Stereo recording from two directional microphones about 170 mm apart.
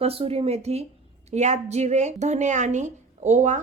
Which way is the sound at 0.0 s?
35° right (ahead or behind).